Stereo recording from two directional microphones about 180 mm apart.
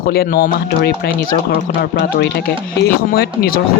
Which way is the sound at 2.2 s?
60° left (ahead or behind).